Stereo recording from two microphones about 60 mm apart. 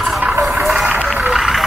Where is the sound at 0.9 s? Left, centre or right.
Centre.